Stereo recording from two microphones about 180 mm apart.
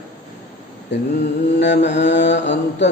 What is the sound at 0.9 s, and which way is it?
Mantra, 70° left (ahead or behind).